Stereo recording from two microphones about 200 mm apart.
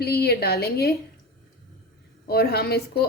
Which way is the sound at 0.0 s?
55° left (ahead or behind).